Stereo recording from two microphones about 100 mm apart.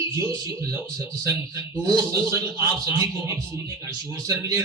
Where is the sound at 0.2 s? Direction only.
30° right (ahead or behind).